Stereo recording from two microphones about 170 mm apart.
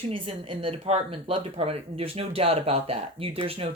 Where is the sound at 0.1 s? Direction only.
30° right (ahead or behind).